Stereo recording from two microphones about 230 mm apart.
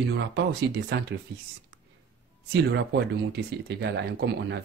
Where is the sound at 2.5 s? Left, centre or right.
Right.